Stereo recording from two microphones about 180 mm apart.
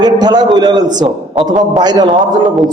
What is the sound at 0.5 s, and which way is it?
A man's voice, 20° right (ahead or behind).